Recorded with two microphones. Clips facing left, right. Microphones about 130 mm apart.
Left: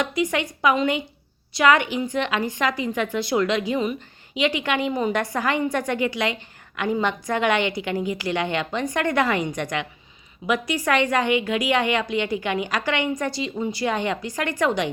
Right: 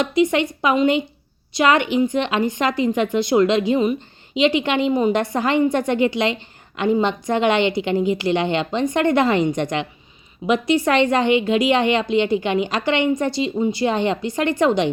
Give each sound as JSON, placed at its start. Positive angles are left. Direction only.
{"t": 0.0, "sound": "a woman's voice", "side_deg": -25}